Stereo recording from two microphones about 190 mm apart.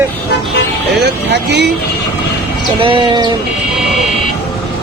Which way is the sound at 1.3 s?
60° right (ahead or behind).